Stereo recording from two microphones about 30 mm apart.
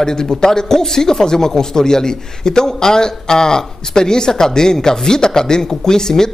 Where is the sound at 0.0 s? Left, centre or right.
Left.